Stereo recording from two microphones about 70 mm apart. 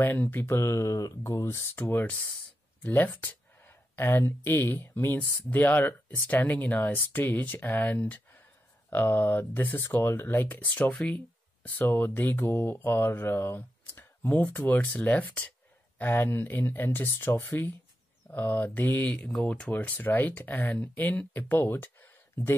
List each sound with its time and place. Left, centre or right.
0.0 s speech: left
1.4 s speech: left
10.7 s speech: centre
11.8 s speech: left
16.3 s speech: left
17.3 s speech: left
18.3 s speech: left